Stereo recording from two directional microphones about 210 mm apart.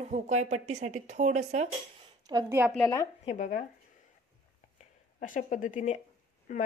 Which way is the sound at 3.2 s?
35° left (ahead or behind).